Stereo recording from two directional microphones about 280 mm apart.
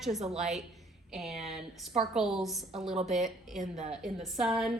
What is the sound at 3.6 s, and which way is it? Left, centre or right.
Speech, right.